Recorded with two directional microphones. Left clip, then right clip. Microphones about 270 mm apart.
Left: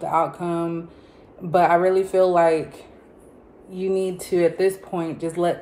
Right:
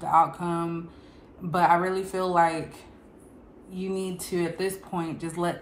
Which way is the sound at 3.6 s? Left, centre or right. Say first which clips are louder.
Left 9 dB; centre.